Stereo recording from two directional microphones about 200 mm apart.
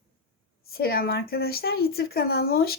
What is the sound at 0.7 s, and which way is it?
Speech, 50° left (ahead or behind).